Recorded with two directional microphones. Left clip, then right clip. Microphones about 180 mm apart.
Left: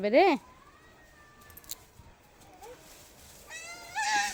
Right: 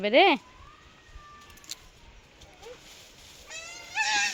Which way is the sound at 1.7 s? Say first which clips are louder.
Right 4 dB; 25° left (ahead or behind).